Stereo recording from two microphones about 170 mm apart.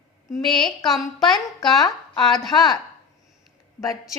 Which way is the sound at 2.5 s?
25° left (ahead or behind).